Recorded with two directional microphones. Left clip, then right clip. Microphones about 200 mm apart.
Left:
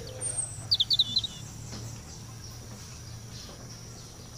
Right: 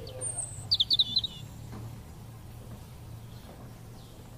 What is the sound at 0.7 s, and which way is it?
Chirp, centre (ahead or behind).